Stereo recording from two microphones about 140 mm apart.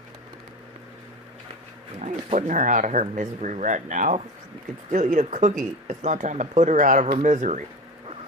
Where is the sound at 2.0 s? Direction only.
55° right (ahead or behind).